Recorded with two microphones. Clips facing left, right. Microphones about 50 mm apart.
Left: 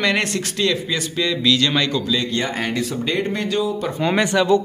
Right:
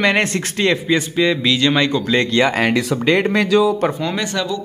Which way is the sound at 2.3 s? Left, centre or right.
Right.